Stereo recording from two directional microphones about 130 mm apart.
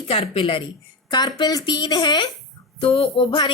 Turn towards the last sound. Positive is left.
turn(degrees=40)  # may be behind; listen again after turning